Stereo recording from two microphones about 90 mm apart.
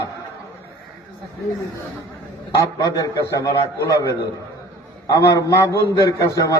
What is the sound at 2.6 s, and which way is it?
A man's voice, 40° left (ahead or behind).